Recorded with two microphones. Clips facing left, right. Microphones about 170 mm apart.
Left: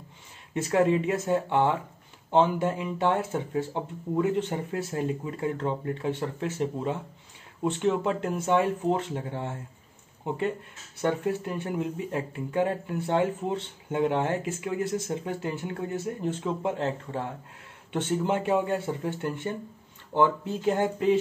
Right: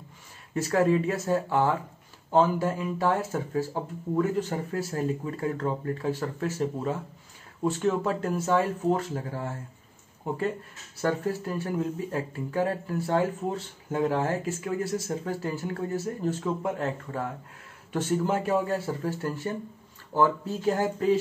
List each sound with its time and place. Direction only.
0.6 s speech: 25° left (ahead or behind)